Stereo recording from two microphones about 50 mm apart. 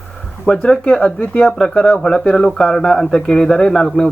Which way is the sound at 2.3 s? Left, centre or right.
Centre.